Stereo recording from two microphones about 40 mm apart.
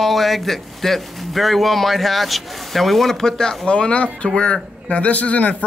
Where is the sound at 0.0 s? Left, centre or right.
Centre.